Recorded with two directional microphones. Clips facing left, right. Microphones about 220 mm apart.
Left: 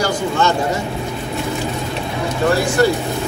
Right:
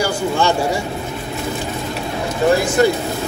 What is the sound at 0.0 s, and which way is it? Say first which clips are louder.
Vehicle: even; 10° right (ahead or behind).